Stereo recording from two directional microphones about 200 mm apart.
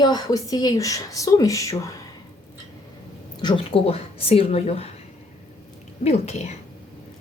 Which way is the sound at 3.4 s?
25° left (ahead or behind).